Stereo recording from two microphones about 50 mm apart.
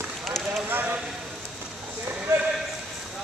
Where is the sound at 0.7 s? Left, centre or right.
Right.